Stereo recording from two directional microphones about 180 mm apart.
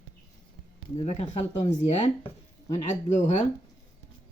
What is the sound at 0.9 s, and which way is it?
Speech, 40° left (ahead or behind).